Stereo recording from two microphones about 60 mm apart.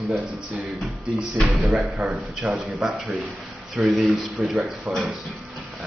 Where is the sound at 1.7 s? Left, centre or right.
Centre.